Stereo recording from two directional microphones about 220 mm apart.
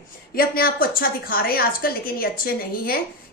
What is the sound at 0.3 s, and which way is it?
A woman's voice, 45° left (ahead or behind).